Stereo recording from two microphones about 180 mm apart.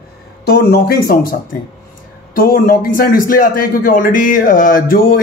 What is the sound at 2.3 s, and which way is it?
A man's voice, 55° left (ahead or behind).